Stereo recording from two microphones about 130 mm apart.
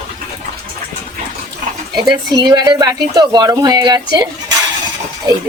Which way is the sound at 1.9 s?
30° right (ahead or behind).